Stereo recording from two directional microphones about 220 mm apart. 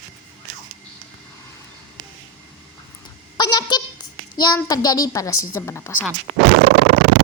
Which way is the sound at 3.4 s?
20° left (ahead or behind).